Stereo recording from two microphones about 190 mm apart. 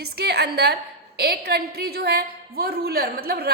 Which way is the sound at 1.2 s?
55° right (ahead or behind).